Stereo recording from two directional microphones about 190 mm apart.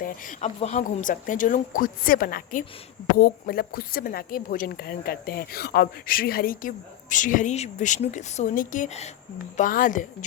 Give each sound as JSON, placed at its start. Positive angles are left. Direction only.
{"t": 0.0, "sound": "speech", "side_deg": 45}